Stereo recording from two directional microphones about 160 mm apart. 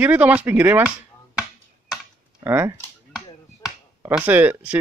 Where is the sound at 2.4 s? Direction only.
15° right (ahead or behind).